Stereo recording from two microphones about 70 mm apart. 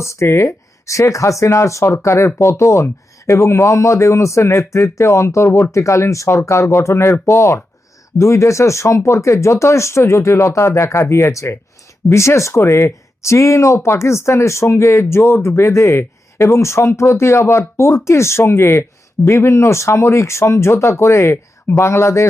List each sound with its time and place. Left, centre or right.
0.0 s speech: left